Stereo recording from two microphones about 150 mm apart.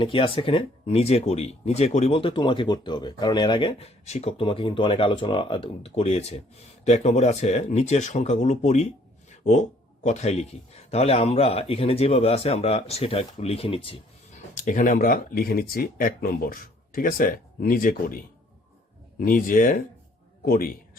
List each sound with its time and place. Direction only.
0.0 s a man's voice: 35° left (ahead or behind)
14.5 s speech: 60° left (ahead or behind)
20.4 s a man's voice: 85° left